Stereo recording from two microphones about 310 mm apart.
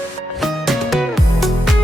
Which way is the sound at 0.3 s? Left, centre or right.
Centre.